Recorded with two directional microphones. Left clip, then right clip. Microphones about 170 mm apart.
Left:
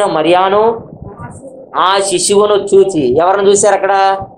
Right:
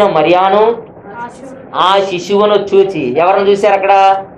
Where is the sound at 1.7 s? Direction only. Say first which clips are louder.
Right 1 dB; 50° left (ahead or behind).